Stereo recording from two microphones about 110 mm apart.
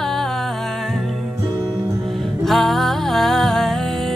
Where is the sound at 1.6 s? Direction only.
35° right (ahead or behind).